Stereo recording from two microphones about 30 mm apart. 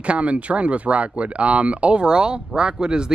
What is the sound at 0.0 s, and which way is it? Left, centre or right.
Speech, right.